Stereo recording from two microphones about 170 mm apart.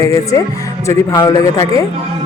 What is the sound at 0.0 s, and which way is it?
A man's voice, 20° left (ahead or behind).